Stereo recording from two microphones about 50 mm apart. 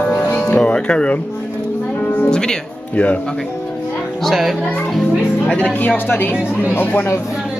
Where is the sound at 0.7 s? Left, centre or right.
Left.